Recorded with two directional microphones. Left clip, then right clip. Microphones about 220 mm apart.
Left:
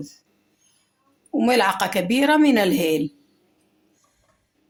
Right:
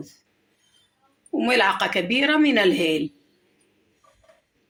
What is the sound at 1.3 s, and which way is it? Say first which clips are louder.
Speech: left 1 dB; 60° left (ahead or behind).